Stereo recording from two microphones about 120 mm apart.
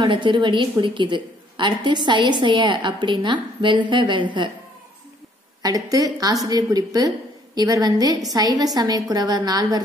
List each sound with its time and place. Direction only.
0.0 s a woman's voice: 40° right (ahead or behind)
5.6 s a woman's voice: 30° right (ahead or behind)